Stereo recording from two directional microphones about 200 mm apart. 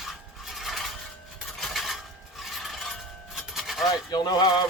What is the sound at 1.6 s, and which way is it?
Filing, centre (ahead or behind).